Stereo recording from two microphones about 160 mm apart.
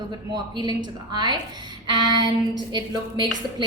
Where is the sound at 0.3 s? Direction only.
25° right (ahead or behind).